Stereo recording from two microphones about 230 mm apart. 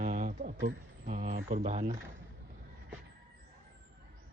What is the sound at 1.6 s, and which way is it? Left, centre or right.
Speech, right.